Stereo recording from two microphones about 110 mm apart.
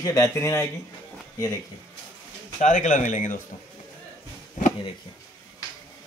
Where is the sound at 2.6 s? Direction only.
90° left.